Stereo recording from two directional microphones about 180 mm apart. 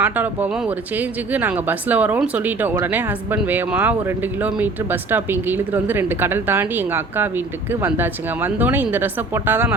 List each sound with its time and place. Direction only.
0.0 s speech: 10° right (ahead or behind)